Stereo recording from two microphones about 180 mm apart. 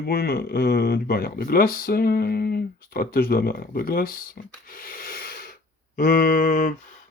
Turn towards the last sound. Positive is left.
turn(degrees=45)  # may be behind; listen again after turning